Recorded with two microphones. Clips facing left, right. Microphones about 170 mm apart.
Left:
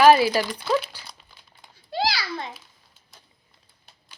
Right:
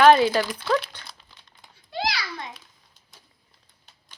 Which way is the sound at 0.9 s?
10° left (ahead or behind).